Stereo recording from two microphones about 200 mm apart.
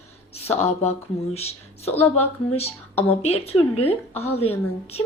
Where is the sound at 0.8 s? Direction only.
30° left (ahead or behind).